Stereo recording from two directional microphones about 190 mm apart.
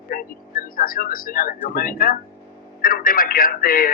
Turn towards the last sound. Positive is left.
turn(degrees=50)  # may be behind; listen again after turning